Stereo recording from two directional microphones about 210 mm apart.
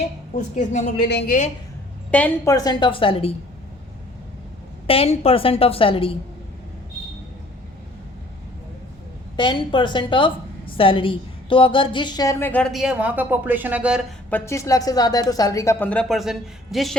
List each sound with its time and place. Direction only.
0.3 s a woman's voice: 35° left (ahead or behind)
0.9 s a woman's voice: 50° left (ahead or behind)
2.0 s a woman's voice: 5° left (ahead or behind); by 3.3 s 25° left (ahead or behind)
4.9 s a woman's voice: 25° left (ahead or behind)
9.3 s a woman's voice: 20° left (ahead or behind); by 14.0 s 5° right (ahead or behind)
14.3 s a woman's voice: 10° left (ahead or behind)